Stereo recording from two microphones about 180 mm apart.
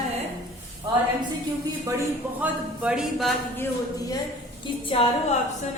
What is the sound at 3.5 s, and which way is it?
Speech, 15° left (ahead or behind).